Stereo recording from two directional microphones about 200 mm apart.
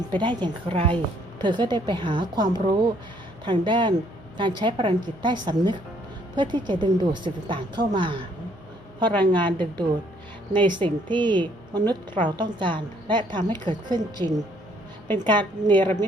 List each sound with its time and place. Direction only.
0.2 s a woman's voice: 25° right (ahead or behind)
9.2 s a woman's voice: 25° right (ahead or behind)